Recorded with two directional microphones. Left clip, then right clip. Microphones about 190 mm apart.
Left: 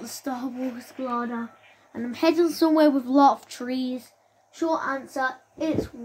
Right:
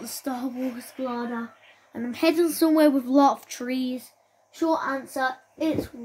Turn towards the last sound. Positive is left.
turn(degrees=-15)  # may be behind; listen again after turning